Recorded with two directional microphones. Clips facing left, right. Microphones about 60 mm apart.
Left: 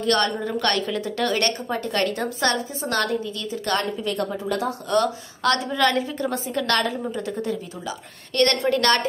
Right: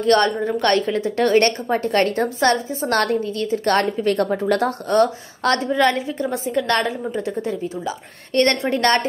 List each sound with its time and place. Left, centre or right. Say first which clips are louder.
0.0 s a woman's voice: right 5 dB; right
4.9 s a woman's voice: right 4 dB; right